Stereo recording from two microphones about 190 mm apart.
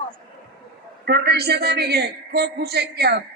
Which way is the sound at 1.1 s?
55° right (ahead or behind).